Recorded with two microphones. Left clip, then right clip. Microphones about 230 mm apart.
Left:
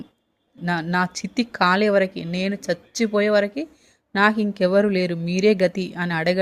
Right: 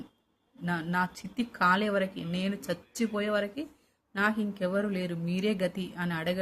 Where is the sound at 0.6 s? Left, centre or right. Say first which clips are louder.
Left 8 dB; left.